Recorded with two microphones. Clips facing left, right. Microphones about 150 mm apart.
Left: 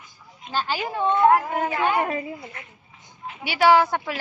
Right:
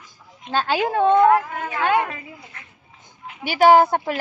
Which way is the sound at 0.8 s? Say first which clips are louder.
Right 7 dB; 65° right (ahead or behind).